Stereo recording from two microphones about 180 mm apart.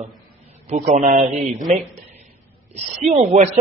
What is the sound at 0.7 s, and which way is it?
A man's voice, 40° right (ahead or behind).